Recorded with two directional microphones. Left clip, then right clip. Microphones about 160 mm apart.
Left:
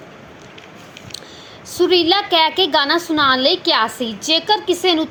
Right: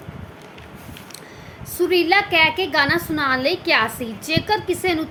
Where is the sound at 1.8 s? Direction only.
20° left (ahead or behind).